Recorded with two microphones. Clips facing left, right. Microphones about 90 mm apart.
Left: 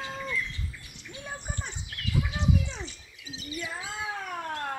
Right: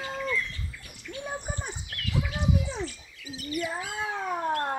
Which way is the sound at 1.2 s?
15° right (ahead or behind).